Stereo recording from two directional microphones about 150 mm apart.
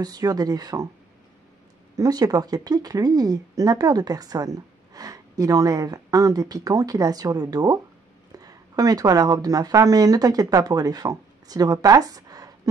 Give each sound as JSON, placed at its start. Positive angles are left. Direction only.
{"t": 0.0, "sound": "a woman's voice", "side_deg": -25}
{"t": 2.0, "sound": "a woman's voice", "side_deg": -25}